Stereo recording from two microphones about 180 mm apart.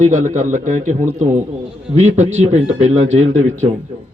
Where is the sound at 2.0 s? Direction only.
40° right (ahead or behind).